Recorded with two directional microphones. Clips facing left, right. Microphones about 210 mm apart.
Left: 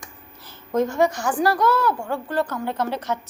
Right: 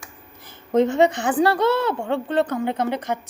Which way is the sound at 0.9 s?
20° right (ahead or behind).